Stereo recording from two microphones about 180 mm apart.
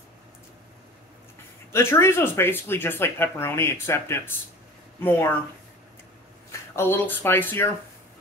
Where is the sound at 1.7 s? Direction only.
15° left (ahead or behind).